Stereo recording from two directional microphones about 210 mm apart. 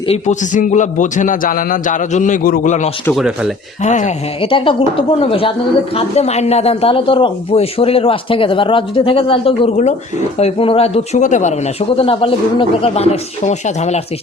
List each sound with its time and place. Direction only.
0.1 s a man's voice: 35° left (ahead or behind)
3.1 s speech: centre (ahead or behind)
3.8 s a man's voice: 35° left (ahead or behind)